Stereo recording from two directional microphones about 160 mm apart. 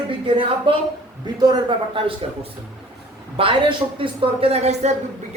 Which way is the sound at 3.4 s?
35° right (ahead or behind).